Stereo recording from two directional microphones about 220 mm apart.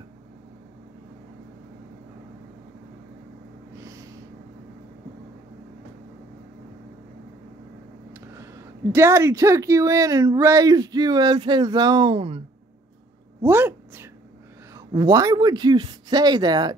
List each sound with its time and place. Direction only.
3.7 s snort: 15° right (ahead or behind)
8.1 s a sound: 10° right (ahead or behind)
8.9 s speech: 10° right (ahead or behind)
13.4 s speech: 10° right (ahead or behind)